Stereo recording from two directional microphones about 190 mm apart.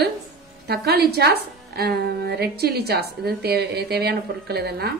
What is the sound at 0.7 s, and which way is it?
A woman's voice, 55° right (ahead or behind).